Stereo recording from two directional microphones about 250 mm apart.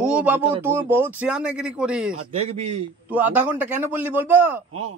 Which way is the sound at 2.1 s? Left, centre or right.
Right.